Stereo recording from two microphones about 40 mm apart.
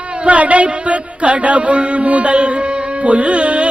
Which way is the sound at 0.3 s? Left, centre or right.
Right.